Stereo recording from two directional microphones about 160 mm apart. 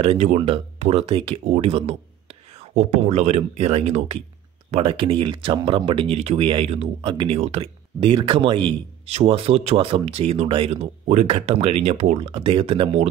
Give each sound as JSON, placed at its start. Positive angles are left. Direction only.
{"t": 0.0, "sound": "speech", "side_deg": -40}